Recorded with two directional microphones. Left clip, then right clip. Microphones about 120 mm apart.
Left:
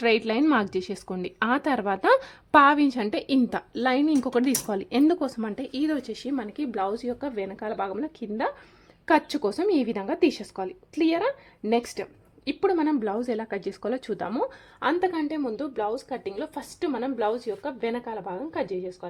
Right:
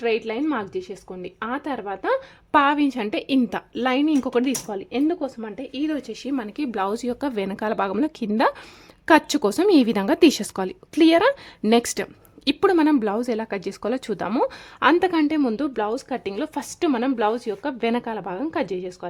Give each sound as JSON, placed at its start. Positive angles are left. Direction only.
{"t": 0.0, "sound": "a woman's voice", "side_deg": 15}
{"t": 2.5, "sound": "a woman's voice", "side_deg": 0}
{"t": 4.6, "sound": "speech", "side_deg": 10}
{"t": 6.7, "sound": "speech", "side_deg": -45}
{"t": 9.0, "sound": "speech", "side_deg": -45}